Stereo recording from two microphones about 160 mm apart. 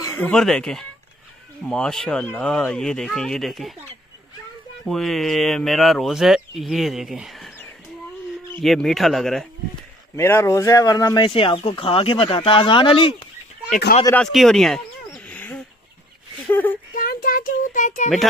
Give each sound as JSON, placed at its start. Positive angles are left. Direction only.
{"t": 0.1, "sound": "speech", "side_deg": 10}
{"t": 4.8, "sound": "speech", "side_deg": 0}
{"t": 8.5, "sound": "speech", "side_deg": 0}
{"t": 10.1, "sound": "speech", "side_deg": 15}
{"t": 13.7, "sound": "speech", "side_deg": 75}
{"t": 14.1, "sound": "bird", "side_deg": 0}
{"t": 16.4, "sound": "a sound", "side_deg": 10}
{"t": 16.9, "sound": "a sound", "side_deg": 65}